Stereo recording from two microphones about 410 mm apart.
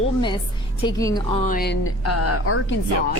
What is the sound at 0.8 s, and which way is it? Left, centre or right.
A woman's voice, centre.